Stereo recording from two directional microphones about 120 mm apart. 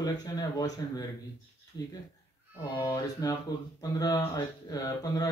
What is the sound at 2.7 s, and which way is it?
Speech, 30° left (ahead or behind).